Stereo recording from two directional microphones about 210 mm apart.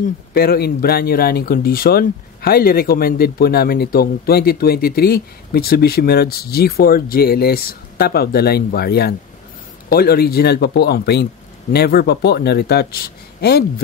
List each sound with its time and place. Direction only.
0.3 s speech: 45° left (ahead or behind)